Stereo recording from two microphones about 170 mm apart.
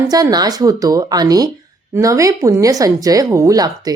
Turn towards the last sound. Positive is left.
turn(degrees=-20)  # may be behind; listen again after turning